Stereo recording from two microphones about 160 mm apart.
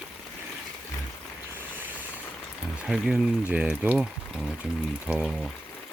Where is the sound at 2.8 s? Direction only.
Centre (ahead or behind).